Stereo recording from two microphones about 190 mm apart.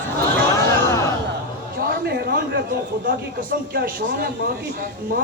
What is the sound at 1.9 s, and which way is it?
Speech, 55° right (ahead or behind).